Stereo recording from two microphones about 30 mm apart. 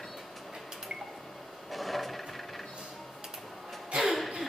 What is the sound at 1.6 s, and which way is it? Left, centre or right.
Wood, centre.